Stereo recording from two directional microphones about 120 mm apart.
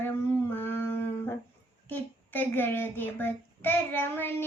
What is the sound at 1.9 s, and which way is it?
A child's voice, 15° left (ahead or behind).